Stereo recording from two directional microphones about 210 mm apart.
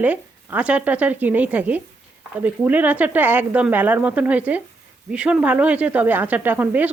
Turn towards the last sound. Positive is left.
turn(degrees=-10)  # may be behind; listen again after turning